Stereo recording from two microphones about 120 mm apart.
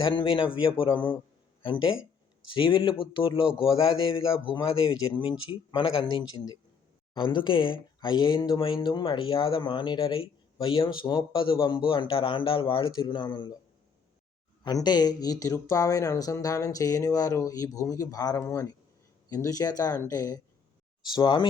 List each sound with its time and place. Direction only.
0.1 s speech: 45° left (ahead or behind)
2.5 s speech: 45° left (ahead or behind)
14.6 s speech: 35° left (ahead or behind)